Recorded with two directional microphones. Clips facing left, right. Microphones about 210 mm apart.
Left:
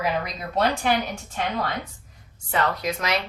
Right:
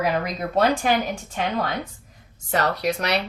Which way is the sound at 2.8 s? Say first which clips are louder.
Right 3 dB; 35° right (ahead or behind).